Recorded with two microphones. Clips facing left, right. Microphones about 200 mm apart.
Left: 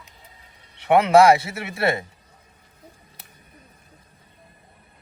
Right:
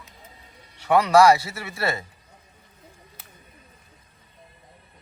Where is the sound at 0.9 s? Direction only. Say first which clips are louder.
Left 2 dB; 25° left (ahead or behind).